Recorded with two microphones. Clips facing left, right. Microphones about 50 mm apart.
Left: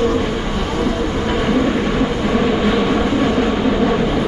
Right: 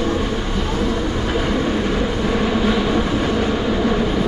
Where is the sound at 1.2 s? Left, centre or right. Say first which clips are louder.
Left 2 dB; centre.